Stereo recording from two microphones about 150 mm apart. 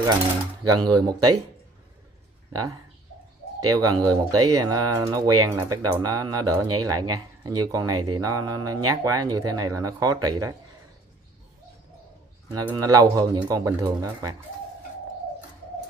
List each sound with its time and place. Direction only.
0.7 s speech: 25° right (ahead or behind)
3.6 s speech: 25° right (ahead or behind)
12.6 s speech: 20° right (ahead or behind)